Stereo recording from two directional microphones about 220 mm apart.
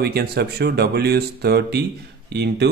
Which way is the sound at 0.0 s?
45° right (ahead or behind).